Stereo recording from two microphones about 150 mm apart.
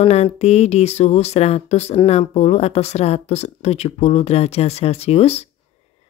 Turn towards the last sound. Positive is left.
turn(degrees=45)  # may be behind; listen again after turning